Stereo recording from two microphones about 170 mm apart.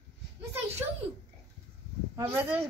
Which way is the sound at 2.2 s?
15° right (ahead or behind).